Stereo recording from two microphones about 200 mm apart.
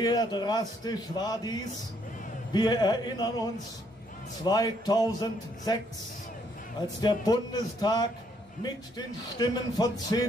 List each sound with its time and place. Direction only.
0.0 s speech: 20° left (ahead or behind)
7.0 s speech: 20° left (ahead or behind)